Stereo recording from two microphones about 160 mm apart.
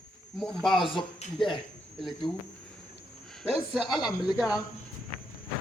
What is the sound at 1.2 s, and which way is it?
Speech, 40° left (ahead or behind).